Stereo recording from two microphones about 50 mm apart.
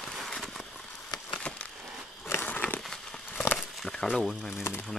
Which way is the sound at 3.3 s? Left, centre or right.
Left.